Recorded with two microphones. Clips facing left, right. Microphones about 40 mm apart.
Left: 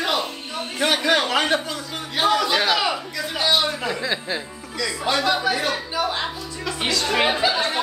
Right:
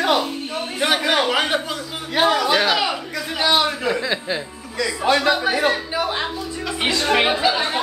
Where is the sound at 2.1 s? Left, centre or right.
Right.